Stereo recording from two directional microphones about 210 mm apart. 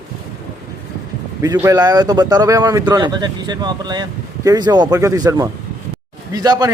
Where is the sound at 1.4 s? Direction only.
15° right (ahead or behind).